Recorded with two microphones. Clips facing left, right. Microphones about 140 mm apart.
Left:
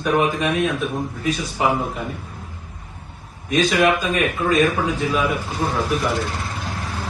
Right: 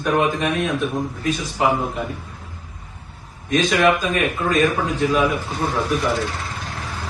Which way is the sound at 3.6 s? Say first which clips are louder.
Even; 5° left (ahead or behind).